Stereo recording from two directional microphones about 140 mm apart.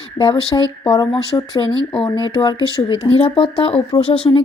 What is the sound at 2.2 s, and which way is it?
A woman's voice, 35° left (ahead or behind).